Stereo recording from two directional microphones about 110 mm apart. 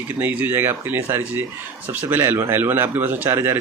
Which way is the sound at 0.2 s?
15° right (ahead or behind).